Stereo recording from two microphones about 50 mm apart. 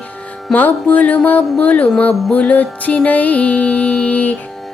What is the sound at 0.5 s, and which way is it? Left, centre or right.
Music, left.